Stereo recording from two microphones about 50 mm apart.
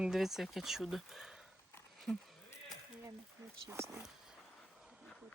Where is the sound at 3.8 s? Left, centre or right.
Right.